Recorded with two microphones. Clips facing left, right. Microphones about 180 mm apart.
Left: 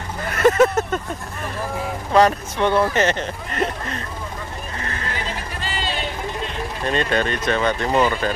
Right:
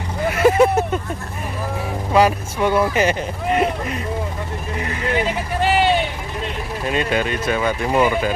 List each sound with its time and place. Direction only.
0.3 s vehicle: 10° right (ahead or behind)
2.1 s speech: 10° right (ahead or behind)
4.7 s vehicle: 15° right (ahead or behind)
5.1 s a sound: 65° right (ahead or behind)
6.8 s speech: 10° right (ahead or behind)